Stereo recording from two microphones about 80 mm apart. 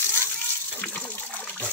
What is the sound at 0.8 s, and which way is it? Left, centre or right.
Water, left.